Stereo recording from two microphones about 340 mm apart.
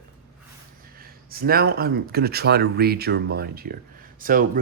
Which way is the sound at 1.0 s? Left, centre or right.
Right.